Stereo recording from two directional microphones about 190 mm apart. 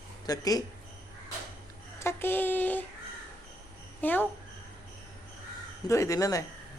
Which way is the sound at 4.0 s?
10° left (ahead or behind).